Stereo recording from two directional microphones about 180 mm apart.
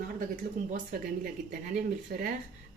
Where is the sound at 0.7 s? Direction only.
50° right (ahead or behind).